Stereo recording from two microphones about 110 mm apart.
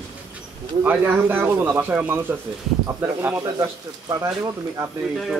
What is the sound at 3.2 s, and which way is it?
Speech, 20° right (ahead or behind).